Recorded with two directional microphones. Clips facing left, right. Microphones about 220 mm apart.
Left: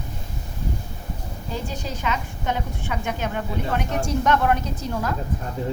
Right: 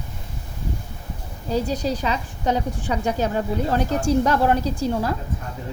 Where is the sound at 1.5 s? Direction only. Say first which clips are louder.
Right 9 dB; 40° right (ahead or behind).